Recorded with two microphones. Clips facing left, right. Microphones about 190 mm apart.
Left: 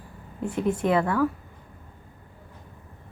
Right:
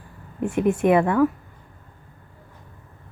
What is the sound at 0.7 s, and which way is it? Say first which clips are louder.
Speech: right 5 dB; 20° right (ahead or behind).